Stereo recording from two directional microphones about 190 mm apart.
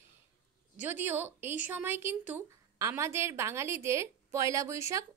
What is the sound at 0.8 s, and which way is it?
A woman's voice, 10° right (ahead or behind).